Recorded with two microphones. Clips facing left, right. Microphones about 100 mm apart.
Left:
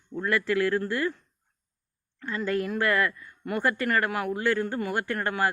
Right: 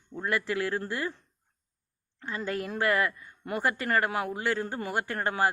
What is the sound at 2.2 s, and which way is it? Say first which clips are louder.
Speech: left 5 dB; 25° right (ahead or behind).